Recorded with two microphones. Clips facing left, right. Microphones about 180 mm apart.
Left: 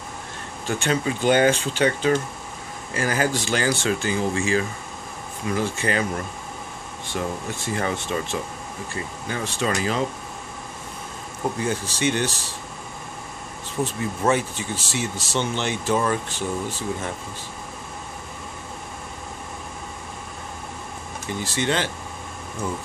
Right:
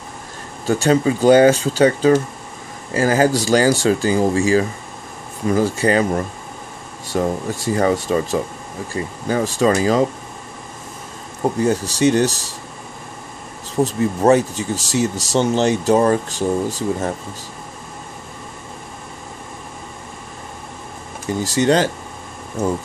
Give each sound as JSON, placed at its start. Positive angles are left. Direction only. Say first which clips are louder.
{"t": 0.7, "sound": "speech", "louder": "right 8 dB", "side_deg": -40}
{"t": 11.4, "sound": "speech", "louder": "right 7 dB", "side_deg": -40}
{"t": 13.7, "sound": "speech", "louder": "right 8 dB", "side_deg": -40}
{"t": 21.3, "sound": "speech", "louder": "right 9 dB", "side_deg": -40}